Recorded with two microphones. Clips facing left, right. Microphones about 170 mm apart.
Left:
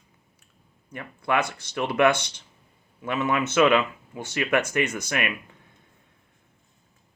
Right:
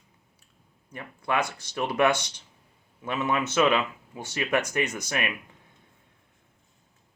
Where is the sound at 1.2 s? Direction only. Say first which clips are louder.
Left 2 dB; 15° right (ahead or behind).